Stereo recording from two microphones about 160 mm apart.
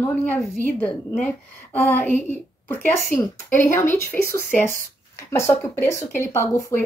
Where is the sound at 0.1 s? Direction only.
10° left (ahead or behind).